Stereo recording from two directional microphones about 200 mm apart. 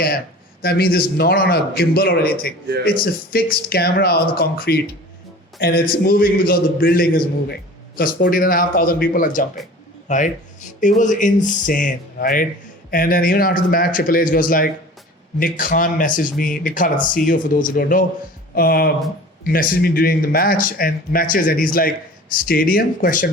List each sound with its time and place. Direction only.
0.6 s speech: 50° left (ahead or behind)